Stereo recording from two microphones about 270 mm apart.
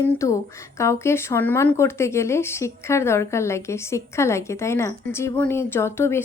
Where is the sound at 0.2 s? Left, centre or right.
Centre.